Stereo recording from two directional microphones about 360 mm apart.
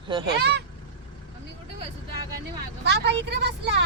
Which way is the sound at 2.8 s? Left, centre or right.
Right.